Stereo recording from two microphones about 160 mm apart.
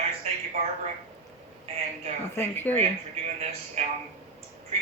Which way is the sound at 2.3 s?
15° left (ahead or behind).